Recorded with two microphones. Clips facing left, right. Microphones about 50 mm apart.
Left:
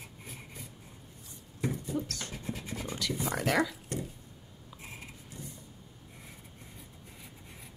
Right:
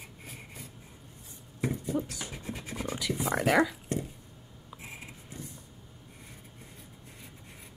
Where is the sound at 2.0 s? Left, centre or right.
Centre.